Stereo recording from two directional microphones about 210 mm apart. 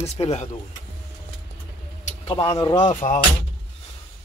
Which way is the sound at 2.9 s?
35° left (ahead or behind).